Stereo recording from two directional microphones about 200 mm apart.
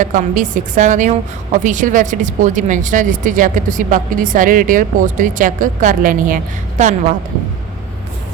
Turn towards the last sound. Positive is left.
turn(degrees=-35)  # may be behind; listen again after turning